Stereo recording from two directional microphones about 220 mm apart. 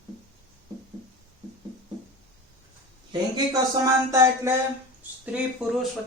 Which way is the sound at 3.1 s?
15° right (ahead or behind).